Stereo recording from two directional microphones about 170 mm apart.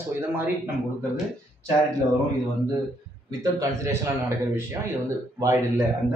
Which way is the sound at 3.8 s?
15° right (ahead or behind).